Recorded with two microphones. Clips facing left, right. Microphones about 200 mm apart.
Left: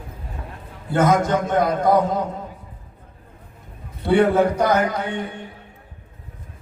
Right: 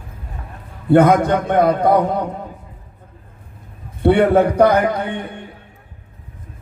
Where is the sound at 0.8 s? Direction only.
60° right (ahead or behind).